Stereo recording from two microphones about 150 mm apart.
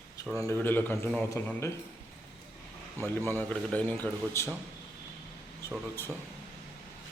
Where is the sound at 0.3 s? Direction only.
20° left (ahead or behind).